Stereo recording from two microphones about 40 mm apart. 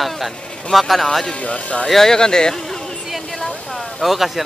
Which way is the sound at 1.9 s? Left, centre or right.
Centre.